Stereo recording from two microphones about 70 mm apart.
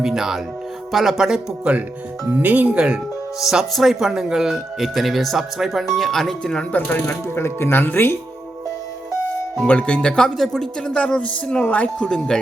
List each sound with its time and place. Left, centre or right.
0.0 s speech: centre
1.7 s speech: centre; by 8.2 s left
9.6 s speech: centre